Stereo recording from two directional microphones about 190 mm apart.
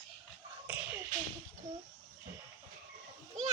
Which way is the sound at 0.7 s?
10° right (ahead or behind).